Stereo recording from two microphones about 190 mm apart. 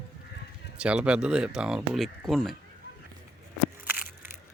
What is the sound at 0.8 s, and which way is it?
Speech, 5° right (ahead or behind).